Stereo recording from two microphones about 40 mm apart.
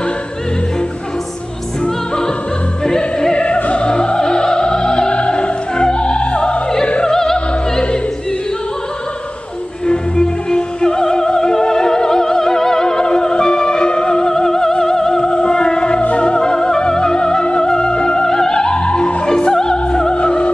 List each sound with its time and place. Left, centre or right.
2.8 s opera: centre
3.4 s opera: left
7.1 s music: centre
9.8 s opera: left
16.0 s music: left
16.3 s music: centre